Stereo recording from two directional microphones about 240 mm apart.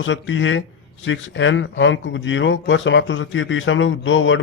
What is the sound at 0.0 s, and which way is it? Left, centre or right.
Speech, left.